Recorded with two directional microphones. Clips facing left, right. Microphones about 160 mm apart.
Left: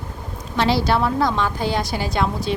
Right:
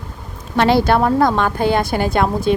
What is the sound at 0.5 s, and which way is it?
Speech, 55° right (ahead or behind).